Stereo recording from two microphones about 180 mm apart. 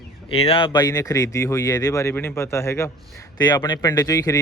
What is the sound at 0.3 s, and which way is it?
A man's voice, 30° left (ahead or behind).